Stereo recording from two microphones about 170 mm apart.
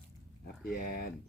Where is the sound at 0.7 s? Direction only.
60° left (ahead or behind).